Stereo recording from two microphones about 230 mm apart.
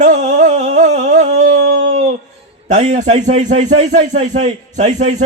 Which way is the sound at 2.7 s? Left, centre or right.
Right.